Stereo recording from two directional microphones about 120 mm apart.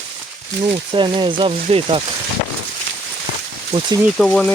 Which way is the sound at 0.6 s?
45° right (ahead or behind).